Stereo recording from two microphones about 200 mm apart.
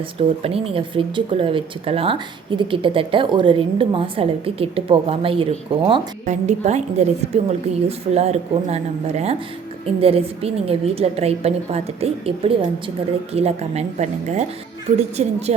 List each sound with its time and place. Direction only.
0.2 s speech: 30° right (ahead or behind)